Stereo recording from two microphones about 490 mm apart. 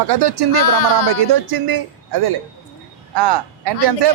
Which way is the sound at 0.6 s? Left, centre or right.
Left.